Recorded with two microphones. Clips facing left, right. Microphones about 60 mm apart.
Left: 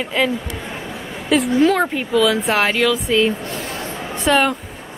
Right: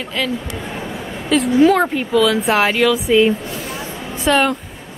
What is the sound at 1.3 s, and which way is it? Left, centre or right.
A woman's voice, centre.